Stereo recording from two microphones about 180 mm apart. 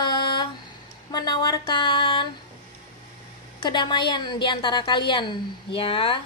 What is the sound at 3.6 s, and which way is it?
A woman's voice, 25° left (ahead or behind).